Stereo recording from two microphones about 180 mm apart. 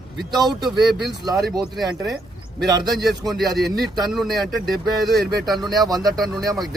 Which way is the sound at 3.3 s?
Centre (ahead or behind).